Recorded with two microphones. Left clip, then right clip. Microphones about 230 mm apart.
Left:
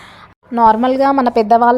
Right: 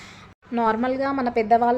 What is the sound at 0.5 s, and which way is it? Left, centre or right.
A woman's voice, left.